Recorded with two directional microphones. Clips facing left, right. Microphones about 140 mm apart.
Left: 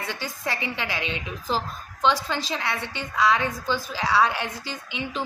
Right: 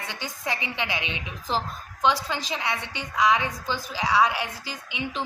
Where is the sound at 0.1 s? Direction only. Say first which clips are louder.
Right 1 dB; 15° right (ahead or behind).